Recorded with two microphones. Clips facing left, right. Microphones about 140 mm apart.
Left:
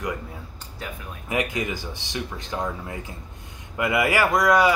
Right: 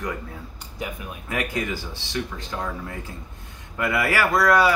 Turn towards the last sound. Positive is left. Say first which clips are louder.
# even
turn(degrees=15)  # may be behind; listen again after turning